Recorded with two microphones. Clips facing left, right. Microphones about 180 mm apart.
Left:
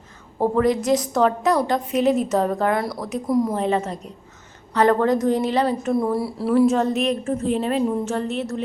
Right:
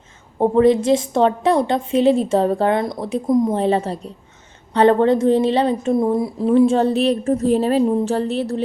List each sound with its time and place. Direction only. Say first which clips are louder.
0.3 s a woman's voice: right 5 dB; 25° right (ahead or behind)